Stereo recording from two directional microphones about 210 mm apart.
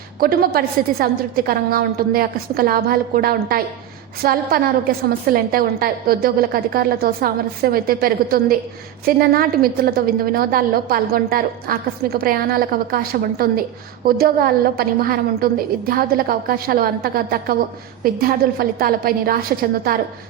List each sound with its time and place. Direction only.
0.2 s a woman's voice: 45° right (ahead or behind)